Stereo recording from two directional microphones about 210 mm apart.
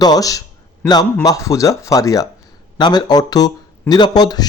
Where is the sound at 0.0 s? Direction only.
15° left (ahead or behind).